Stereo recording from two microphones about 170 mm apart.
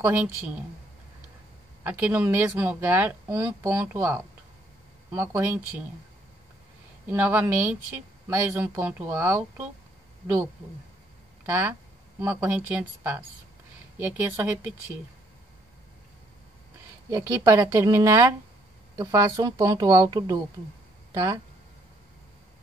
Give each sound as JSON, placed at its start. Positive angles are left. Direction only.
{"t": 0.0, "sound": "speech", "side_deg": -10}
{"t": 1.8, "sound": "speech", "side_deg": -10}
{"t": 7.1, "sound": "speech", "side_deg": -10}
{"t": 11.4, "sound": "speech", "side_deg": -15}
{"t": 17.1, "sound": "speech", "side_deg": -20}